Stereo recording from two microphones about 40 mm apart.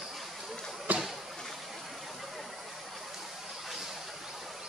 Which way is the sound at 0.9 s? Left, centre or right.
Right.